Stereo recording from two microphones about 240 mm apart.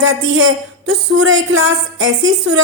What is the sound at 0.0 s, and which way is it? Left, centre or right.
A woman's voice, right.